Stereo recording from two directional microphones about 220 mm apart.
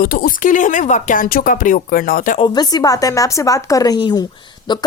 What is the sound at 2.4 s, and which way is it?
Speech, 20° left (ahead or behind).